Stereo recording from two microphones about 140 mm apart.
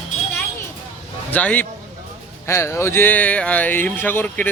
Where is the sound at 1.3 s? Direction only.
10° left (ahead or behind).